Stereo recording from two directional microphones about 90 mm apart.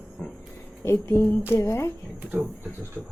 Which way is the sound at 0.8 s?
30° left (ahead or behind).